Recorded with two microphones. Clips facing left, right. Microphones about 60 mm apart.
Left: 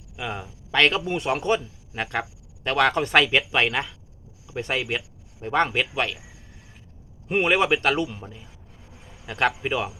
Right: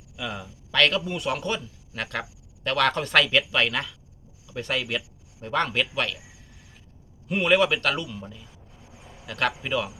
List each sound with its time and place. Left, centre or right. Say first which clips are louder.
0.2 s speech: left 2 dB; left
7.4 s speech: even; left
9.2 s speech: left 3 dB; left